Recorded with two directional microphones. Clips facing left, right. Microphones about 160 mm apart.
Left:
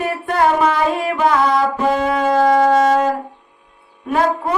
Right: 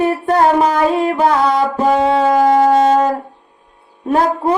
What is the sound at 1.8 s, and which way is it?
Brass instrument, 30° right (ahead or behind).